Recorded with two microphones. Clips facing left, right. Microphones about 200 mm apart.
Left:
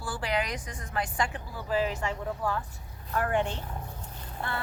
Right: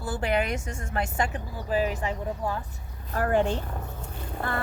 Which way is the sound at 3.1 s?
35° right (ahead or behind).